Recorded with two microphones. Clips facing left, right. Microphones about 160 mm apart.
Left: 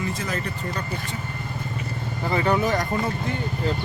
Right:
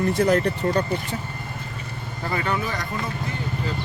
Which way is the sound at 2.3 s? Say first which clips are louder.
Left 4 dB; 30° left (ahead or behind).